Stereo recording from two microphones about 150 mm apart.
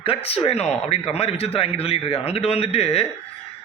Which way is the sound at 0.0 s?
40° left (ahead or behind).